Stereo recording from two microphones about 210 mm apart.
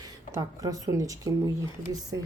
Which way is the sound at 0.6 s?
15° right (ahead or behind).